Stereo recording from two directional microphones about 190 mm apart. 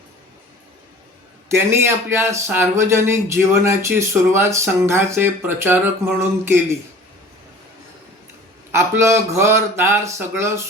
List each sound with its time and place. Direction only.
1.5 s a man's voice: 15° right (ahead or behind)
8.7 s a man's voice: 15° right (ahead or behind)